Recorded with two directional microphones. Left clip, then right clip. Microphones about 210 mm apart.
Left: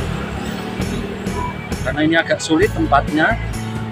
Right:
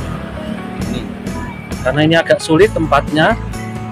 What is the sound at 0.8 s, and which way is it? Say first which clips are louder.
Music: even; centre (ahead or behind).